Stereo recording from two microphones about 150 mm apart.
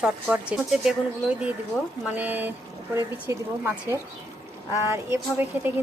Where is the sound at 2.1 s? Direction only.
10° right (ahead or behind).